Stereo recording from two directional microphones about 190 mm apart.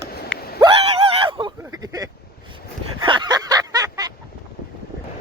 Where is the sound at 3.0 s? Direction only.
25° right (ahead or behind).